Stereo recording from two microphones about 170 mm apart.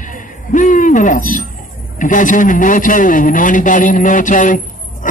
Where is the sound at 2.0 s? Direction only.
50° left (ahead or behind).